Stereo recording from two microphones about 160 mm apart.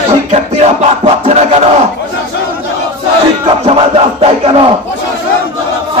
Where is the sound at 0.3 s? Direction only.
40° right (ahead or behind).